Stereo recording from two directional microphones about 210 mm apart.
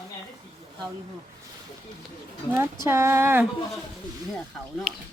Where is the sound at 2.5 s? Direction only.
15° right (ahead or behind).